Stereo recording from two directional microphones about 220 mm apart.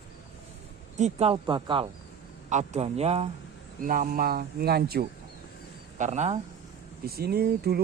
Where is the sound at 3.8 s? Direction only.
40° right (ahead or behind).